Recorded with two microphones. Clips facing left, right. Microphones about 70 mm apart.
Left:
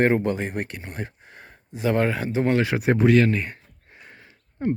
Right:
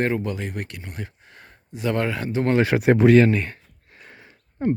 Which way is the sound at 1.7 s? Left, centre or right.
Left.